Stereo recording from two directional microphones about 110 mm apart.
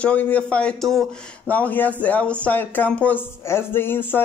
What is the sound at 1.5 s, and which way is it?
Speech, 15° left (ahead or behind).